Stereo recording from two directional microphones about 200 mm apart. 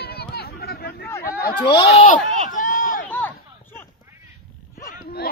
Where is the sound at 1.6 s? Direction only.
25° left (ahead or behind).